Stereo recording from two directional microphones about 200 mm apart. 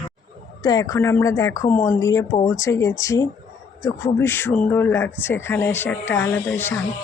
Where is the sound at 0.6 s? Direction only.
20° left (ahead or behind).